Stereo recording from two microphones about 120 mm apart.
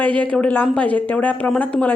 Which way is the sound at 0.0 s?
10° left (ahead or behind).